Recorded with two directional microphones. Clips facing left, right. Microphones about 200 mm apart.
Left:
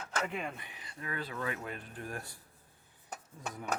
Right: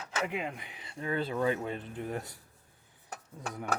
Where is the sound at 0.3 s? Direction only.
15° right (ahead or behind).